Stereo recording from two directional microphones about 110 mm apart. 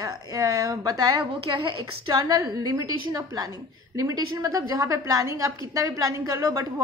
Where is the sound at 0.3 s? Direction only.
35° right (ahead or behind).